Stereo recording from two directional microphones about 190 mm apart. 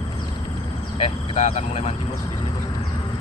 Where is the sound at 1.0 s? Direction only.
35° left (ahead or behind).